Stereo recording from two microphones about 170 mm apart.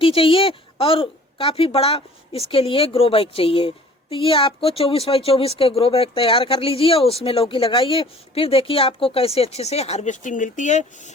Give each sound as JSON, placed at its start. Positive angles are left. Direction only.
{"t": 0.0, "sound": "speech", "side_deg": 30}